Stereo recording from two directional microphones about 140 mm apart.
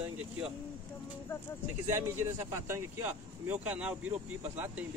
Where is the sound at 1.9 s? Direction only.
20° right (ahead or behind).